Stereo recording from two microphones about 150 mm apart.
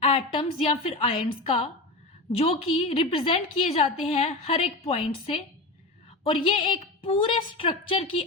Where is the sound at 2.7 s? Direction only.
40° left (ahead or behind).